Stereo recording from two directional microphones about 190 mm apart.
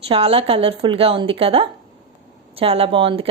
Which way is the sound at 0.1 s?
30° right (ahead or behind).